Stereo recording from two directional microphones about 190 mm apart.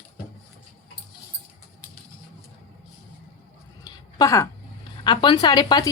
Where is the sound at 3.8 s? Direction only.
20° left (ahead or behind).